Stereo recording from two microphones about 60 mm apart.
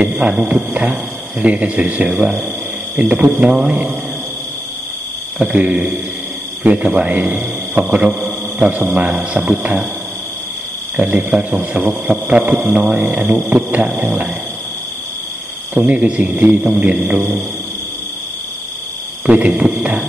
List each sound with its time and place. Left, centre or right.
0.0 s a man's voice: centre
5.4 s a man's voice: right
11.0 s a man's voice: right
15.7 s a man's voice: right
19.2 s a man's voice: right